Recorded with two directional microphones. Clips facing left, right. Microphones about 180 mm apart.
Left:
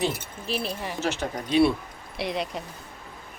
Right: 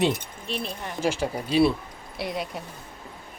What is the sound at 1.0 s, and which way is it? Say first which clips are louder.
A woman's voice: right 5 dB; 10° right (ahead or behind).